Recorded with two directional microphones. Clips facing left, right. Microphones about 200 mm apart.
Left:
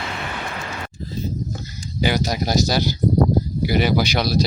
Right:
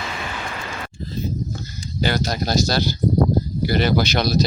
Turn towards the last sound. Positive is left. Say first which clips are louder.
# even
turn(degrees=10)  # may be behind; listen again after turning